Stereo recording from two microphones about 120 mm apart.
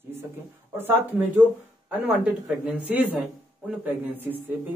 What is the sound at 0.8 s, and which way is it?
Speech, 15° right (ahead or behind).